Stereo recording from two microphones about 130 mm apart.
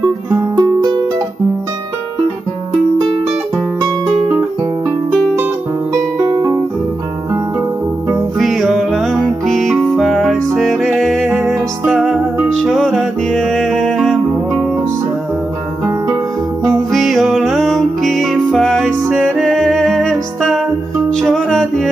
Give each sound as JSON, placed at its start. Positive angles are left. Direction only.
{"t": 0.3, "sound": "music", "side_deg": -30}
{"t": 3.8, "sound": "music", "side_deg": -25}
{"t": 6.1, "sound": "music", "side_deg": -25}
{"t": 8.4, "sound": "music", "side_deg": 0}
{"t": 11.2, "sound": "music", "side_deg": -10}
{"t": 16.9, "sound": "music", "side_deg": 0}